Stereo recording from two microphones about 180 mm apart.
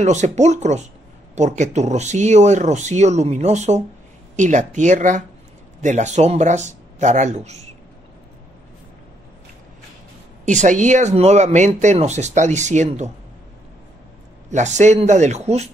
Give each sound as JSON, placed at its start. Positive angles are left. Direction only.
{"t": 0.0, "sound": "speech", "side_deg": -40}
{"t": 10.4, "sound": "speech", "side_deg": -45}
{"t": 14.5, "sound": "speech", "side_deg": -40}